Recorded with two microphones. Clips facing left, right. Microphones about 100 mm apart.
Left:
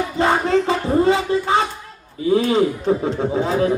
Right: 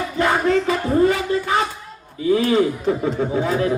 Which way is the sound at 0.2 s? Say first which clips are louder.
Left 1 dB; 25° left (ahead or behind).